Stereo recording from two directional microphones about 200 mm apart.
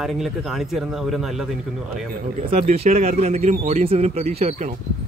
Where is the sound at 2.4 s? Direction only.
35° right (ahead or behind).